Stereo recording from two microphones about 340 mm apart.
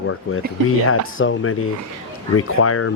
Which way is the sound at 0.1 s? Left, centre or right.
Left.